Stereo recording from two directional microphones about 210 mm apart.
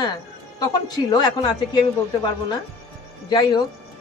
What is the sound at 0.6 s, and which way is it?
A man's voice, 20° left (ahead or behind).